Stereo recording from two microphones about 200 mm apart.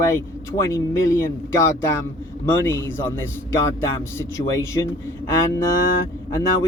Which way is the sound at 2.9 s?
10° left (ahead or behind).